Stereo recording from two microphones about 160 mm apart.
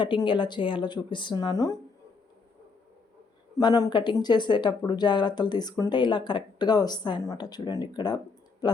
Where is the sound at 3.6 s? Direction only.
25° left (ahead or behind).